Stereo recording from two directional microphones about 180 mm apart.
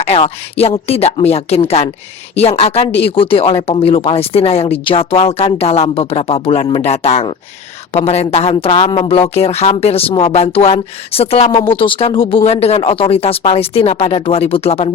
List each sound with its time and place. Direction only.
0.0 s speech: 35° left (ahead or behind)